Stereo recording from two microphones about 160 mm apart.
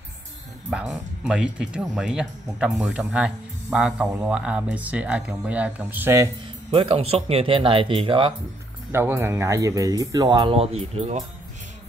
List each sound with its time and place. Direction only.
0.7 s speech: 5° right (ahead or behind)
6.7 s speech: 35° right (ahead or behind)
8.9 s speech: 15° right (ahead or behind); by 11.2 s 45° right (ahead or behind)